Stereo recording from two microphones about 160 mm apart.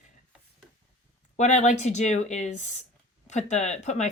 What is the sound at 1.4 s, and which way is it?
Speech, 50° left (ahead or behind).